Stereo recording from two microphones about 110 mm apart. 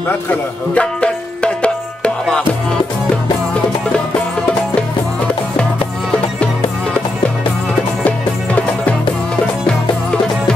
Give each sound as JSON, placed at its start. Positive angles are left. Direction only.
{"t": 0.1, "sound": "music", "side_deg": 15}